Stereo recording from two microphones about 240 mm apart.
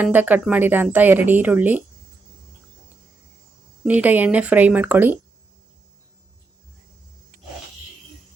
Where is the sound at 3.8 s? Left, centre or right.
Centre.